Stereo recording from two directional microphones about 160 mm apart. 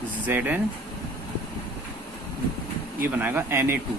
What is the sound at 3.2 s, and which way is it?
Speech, 10° right (ahead or behind).